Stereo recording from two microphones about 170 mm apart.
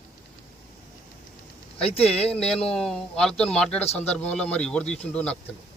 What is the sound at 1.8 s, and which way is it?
Speech, 35° left (ahead or behind).